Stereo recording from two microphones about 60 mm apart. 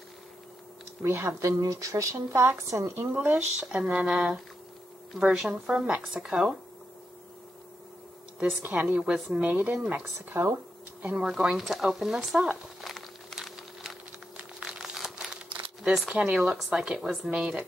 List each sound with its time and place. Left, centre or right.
1.0 s speech: right
1.6 s a woman's voice: right
3.0 s speech: right
3.6 s speech: centre
8.6 s speech: right
10.3 s speech: right
11.0 s speech: centre
12.8 s a sound: centre
14.3 s crumpling: centre
16.1 s speech: centre